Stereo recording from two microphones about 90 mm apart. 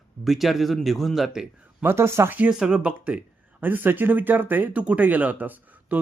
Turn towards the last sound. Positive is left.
turn(degrees=-15)  # may be behind; listen again after turning